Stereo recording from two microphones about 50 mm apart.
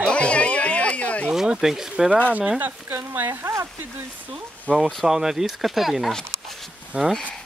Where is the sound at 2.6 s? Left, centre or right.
Right.